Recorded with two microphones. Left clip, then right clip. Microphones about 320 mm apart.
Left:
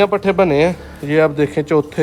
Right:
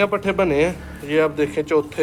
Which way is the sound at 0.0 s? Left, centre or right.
Left.